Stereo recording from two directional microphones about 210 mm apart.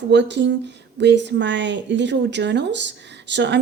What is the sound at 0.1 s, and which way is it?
Speech, 55° right (ahead or behind).